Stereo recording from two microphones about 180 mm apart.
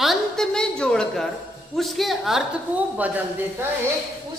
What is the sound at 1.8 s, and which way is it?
A woman's voice, centre (ahead or behind).